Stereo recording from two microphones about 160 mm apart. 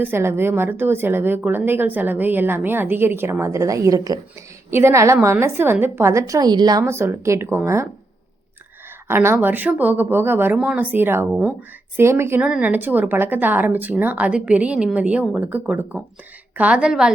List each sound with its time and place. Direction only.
0.0 s a woman's voice: 15° right (ahead or behind)
9.0 s a woman's voice: 15° right (ahead or behind)